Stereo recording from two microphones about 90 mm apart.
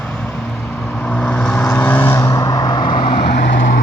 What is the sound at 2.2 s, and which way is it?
Vehicle, 40° left (ahead or behind).